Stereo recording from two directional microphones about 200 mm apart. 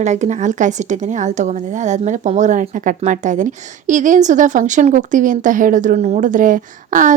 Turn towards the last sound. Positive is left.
turn(degrees=-40)  # may be behind; listen again after turning